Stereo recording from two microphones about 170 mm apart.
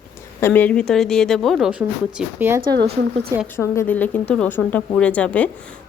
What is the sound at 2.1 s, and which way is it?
Speech, 10° right (ahead or behind).